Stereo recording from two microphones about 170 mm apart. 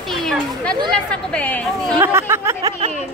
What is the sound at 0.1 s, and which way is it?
A woman's voice, centre (ahead or behind).